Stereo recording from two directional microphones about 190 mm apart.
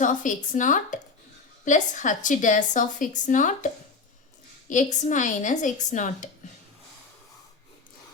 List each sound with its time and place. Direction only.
0.0 s a woman's voice: 40° left (ahead or behind)
4.7 s a woman's voice: 40° left (ahead or behind)